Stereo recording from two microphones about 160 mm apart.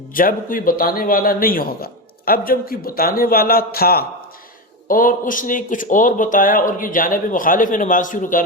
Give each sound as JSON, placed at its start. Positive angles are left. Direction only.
{"t": 0.1, "sound": "a man's voice", "side_deg": 60}
{"t": 4.9, "sound": "a man's voice", "side_deg": 60}